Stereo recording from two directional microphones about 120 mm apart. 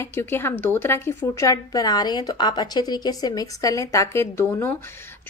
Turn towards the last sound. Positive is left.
turn(degrees=20)  # may be behind; listen again after turning